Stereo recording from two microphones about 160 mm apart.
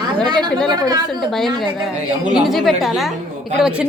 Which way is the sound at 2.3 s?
Centre (ahead or behind).